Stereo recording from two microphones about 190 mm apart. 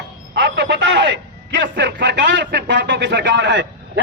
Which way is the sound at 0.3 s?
65° right (ahead or behind).